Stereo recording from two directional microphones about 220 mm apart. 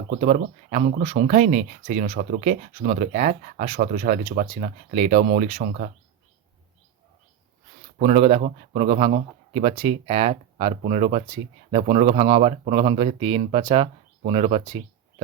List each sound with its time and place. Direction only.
0.1 s speech: 30° right (ahead or behind)
7.9 s a man's voice: 30° right (ahead or behind)